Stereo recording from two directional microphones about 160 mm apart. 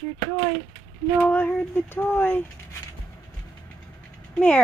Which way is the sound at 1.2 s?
10° left (ahead or behind).